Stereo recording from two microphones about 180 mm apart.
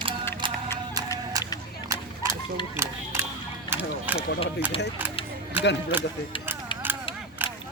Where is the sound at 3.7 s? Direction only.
10° right (ahead or behind).